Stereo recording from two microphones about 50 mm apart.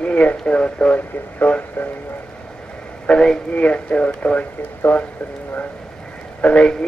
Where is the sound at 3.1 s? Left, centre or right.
Centre.